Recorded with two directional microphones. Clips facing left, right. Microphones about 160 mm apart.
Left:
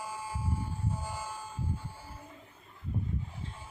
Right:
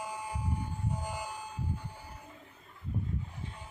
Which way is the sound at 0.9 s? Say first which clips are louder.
Right 1 dB; 20° right (ahead or behind).